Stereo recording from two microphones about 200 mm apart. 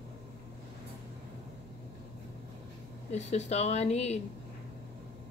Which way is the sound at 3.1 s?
35° left (ahead or behind).